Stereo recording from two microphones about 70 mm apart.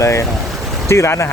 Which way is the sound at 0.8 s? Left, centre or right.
Left.